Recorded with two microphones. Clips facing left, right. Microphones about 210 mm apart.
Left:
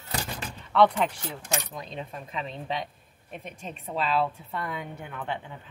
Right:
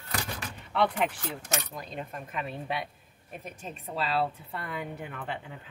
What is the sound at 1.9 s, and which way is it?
Speech, 10° right (ahead or behind).